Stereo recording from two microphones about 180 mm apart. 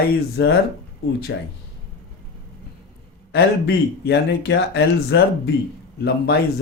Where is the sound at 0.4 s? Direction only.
70° left (ahead or behind).